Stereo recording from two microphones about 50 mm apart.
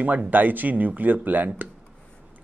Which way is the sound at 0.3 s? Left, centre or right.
Right.